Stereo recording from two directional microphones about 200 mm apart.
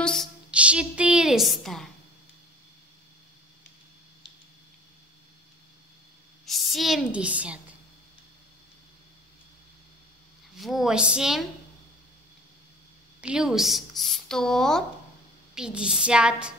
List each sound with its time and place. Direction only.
0.0 s a sound: centre (ahead or behind)
6.4 s a woman's voice: centre (ahead or behind)
10.6 s speech: centre (ahead or behind)
13.2 s speech: 5° right (ahead or behind)